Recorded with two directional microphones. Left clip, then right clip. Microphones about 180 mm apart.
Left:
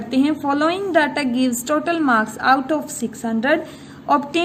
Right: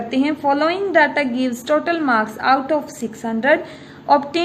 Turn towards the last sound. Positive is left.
turn(degrees=35)  # may be behind; listen again after turning